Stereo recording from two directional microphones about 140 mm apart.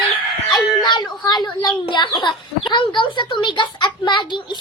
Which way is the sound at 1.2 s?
30° left (ahead or behind).